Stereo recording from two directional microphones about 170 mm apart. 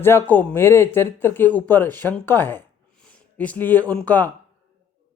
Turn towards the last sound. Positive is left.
turn(degrees=10)  # may be behind; listen again after turning